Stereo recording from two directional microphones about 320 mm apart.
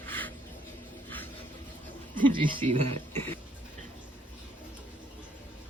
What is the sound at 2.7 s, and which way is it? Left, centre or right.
Speech, right.